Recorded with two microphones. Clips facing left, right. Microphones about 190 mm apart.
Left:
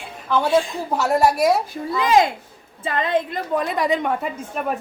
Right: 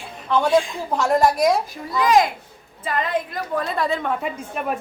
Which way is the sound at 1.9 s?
25° left (ahead or behind).